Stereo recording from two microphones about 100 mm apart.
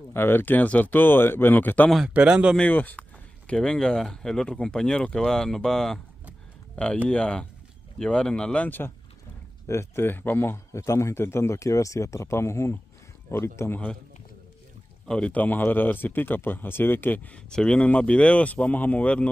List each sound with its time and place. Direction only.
0.1 s a man's voice: 20° left (ahead or behind)
2.0 s speech: 10° right (ahead or behind)
2.5 s speech: 15° left (ahead or behind)
6.7 s a sound: 10° left (ahead or behind)
7.1 s a man's voice: 10° left (ahead or behind); by 13.7 s 25° left (ahead or behind)
15.0 s speech: 10° left (ahead or behind)